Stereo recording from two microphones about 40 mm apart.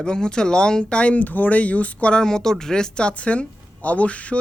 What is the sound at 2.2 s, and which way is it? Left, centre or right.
Speech, centre.